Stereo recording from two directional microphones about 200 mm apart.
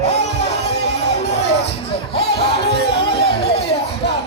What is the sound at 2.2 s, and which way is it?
Music, 55° left (ahead or behind).